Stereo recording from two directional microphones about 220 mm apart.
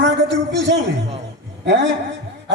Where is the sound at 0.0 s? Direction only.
55° right (ahead or behind).